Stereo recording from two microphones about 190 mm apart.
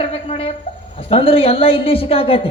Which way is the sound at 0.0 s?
30° left (ahead or behind).